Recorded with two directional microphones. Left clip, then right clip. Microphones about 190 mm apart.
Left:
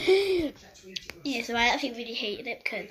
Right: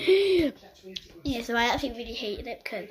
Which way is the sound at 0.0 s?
15° right (ahead or behind).